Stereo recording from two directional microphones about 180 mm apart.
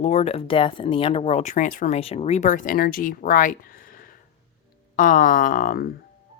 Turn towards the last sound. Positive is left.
turn(degrees=50)  # may be behind; listen again after turning